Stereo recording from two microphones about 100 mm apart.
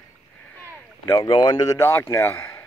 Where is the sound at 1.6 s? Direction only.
25° left (ahead or behind).